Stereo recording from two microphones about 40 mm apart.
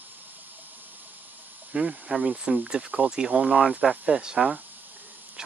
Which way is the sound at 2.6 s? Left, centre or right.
Right.